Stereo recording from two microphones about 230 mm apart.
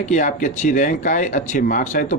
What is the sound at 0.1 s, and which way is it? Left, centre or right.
A man's voice, left.